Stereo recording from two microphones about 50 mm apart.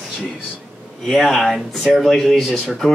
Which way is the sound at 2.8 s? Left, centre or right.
Centre.